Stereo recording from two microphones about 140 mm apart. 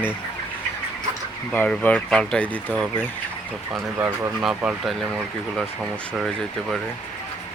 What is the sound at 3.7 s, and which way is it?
Speech, 10° right (ahead or behind).